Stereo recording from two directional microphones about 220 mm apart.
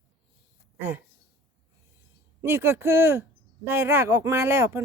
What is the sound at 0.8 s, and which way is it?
Speech, 10° right (ahead or behind).